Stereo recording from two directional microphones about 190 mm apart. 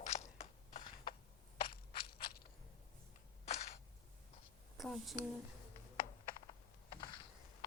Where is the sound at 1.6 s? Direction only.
30° left (ahead or behind).